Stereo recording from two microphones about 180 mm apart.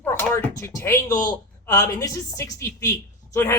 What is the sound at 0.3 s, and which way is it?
A man's voice, 15° left (ahead or behind).